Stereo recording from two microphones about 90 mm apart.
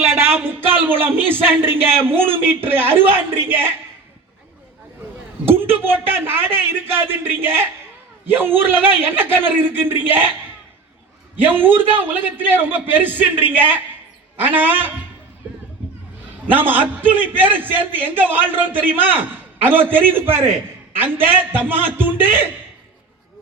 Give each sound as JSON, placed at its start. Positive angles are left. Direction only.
{"t": 0.3, "sound": "a man's voice", "side_deg": -25}
{"t": 5.5, "sound": "a sound", "side_deg": -25}
{"t": 6.1, "sound": "a man's voice", "side_deg": -25}
{"t": 11.4, "sound": "a man's voice", "side_deg": -20}
{"t": 15.4, "sound": "a sound", "side_deg": -15}
{"t": 16.5, "sound": "a man's voice", "side_deg": -20}